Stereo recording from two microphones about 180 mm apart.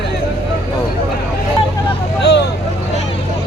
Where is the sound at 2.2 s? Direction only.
75° left (ahead or behind).